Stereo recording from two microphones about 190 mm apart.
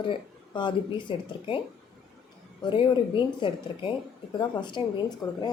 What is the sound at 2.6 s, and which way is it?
A woman's voice, 25° left (ahead or behind).